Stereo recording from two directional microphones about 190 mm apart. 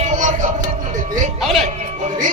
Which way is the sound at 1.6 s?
35° right (ahead or behind).